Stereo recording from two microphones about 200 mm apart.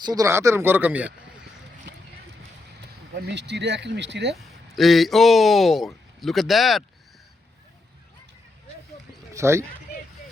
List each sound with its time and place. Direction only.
0.0 s speech: 20° right (ahead or behind)
3.2 s speech: 60° right (ahead or behind)
4.7 s a man's voice: centre (ahead or behind)
9.3 s speech: 15° right (ahead or behind)